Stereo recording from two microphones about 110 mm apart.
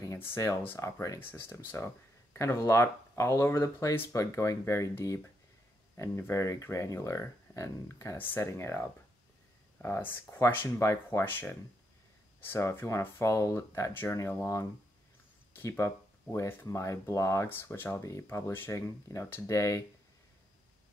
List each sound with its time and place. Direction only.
0.0 s speech: 25° left (ahead or behind)